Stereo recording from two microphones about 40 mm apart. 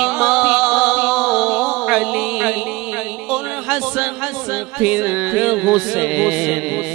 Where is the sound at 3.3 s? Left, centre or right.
Centre.